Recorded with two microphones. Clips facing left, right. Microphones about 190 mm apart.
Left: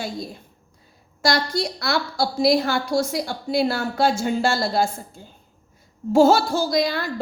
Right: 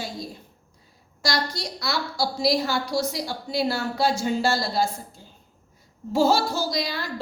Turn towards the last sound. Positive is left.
turn(degrees=55)  # may be behind; listen again after turning